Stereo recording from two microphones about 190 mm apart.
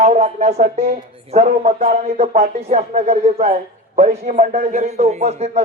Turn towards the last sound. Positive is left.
turn(degrees=-35)  # may be behind; listen again after turning